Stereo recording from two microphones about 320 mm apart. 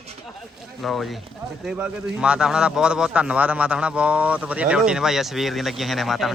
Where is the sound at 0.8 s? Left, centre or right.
Centre.